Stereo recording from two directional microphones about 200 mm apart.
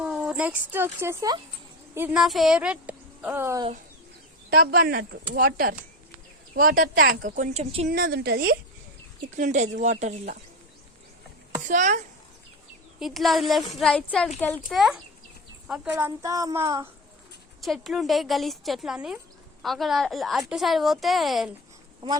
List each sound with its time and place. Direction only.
0.0 s speech: 5° right (ahead or behind)
2.0 s a woman's voice: 5° right (ahead or behind)
4.5 s a woman's voice: 50° right (ahead or behind); by 7.9 s 30° right (ahead or behind)
7.9 s a woman's voice: 45° right (ahead or behind)
9.3 s speech: 35° right (ahead or behind)
11.7 s speech: 35° right (ahead or behind)
13.0 s speech: centre (ahead or behind)
14.7 s a woman's voice: centre (ahead or behind)
17.6 s speech: centre (ahead or behind)
22.0 s a woman's voice: 20° right (ahead or behind)